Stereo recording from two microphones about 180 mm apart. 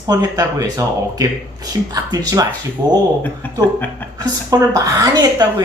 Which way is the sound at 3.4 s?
10° left (ahead or behind).